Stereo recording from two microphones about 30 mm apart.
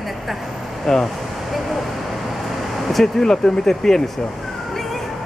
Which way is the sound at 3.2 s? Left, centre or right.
Centre.